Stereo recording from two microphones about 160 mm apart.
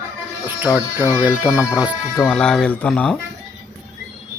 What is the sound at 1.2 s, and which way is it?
Speech, 10° right (ahead or behind).